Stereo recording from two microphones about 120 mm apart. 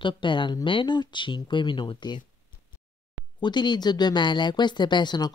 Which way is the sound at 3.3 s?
40° left (ahead or behind).